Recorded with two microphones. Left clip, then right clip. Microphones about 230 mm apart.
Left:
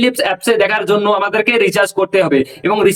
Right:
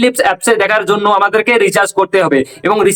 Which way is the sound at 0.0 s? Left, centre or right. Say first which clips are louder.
Right 3 dB; centre.